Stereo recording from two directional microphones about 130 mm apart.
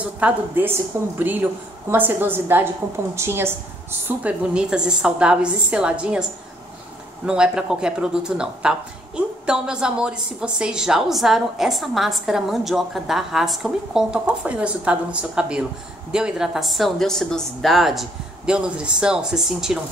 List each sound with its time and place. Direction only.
0.0 s a woman's voice: 10° right (ahead or behind)
4.2 s a woman's voice: 10° right (ahead or behind)
7.2 s speech: 5° right (ahead or behind)